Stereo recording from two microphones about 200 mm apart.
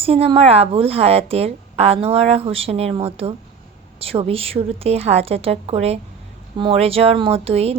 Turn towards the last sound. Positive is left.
turn(degrees=-30)  # may be behind; listen again after turning